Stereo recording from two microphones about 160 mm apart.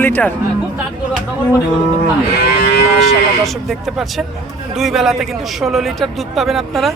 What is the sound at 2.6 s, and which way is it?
Livestock, 90° left.